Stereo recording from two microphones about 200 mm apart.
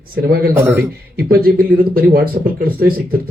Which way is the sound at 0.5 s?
15° right (ahead or behind).